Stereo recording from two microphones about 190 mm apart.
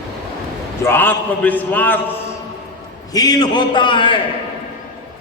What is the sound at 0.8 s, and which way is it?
A man's voice, 10° left (ahead or behind).